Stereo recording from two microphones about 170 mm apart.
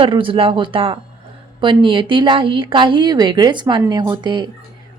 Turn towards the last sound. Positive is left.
turn(degrees=-25)  # may be behind; listen again after turning